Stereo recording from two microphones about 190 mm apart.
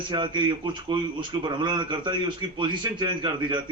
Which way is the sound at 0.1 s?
25° right (ahead or behind).